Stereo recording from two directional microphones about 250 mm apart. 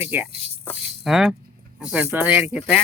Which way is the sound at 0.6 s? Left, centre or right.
Centre.